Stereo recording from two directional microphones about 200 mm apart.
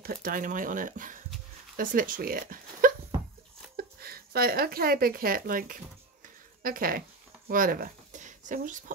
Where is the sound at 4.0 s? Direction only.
50° right (ahead or behind).